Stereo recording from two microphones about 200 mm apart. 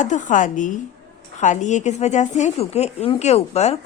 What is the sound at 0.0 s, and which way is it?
A woman's voice, 40° left (ahead or behind).